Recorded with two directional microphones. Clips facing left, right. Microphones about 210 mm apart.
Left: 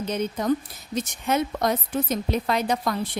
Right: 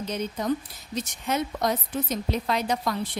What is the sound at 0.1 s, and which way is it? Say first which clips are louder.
A woman's voice: left 4 dB; 55° left (ahead or behind).